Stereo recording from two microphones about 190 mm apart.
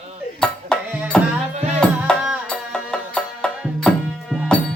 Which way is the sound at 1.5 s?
35° right (ahead or behind).